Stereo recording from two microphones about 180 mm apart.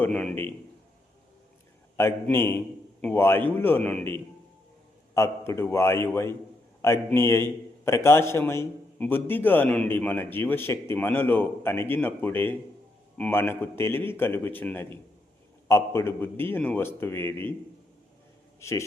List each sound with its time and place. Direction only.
0.0 s a man's voice: 5° left (ahead or behind)
2.3 s a man's voice: 15° left (ahead or behind)
18.6 s a man's voice: 15° left (ahead or behind)